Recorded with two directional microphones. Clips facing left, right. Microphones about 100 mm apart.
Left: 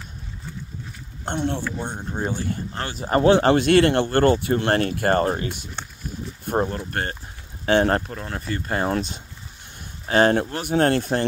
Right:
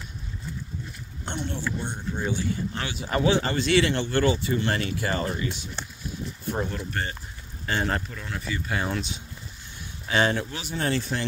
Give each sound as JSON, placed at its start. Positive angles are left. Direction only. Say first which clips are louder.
{"t": 1.2, "sound": "speech", "louder": "left 6 dB", "side_deg": 55}
{"t": 6.6, "sound": "speech", "louder": "left 4 dB", "side_deg": 40}
{"t": 6.9, "sound": "speech", "louder": "left 4 dB", "side_deg": 55}